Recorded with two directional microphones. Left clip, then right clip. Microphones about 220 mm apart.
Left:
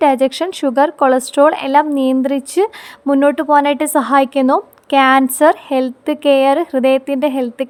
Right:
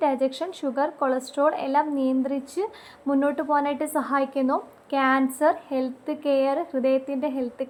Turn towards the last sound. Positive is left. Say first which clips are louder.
# left 11 dB
turn(degrees=55)  # may be behind; listen again after turning